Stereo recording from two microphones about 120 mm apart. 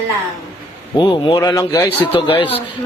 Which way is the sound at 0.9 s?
40° left (ahead or behind).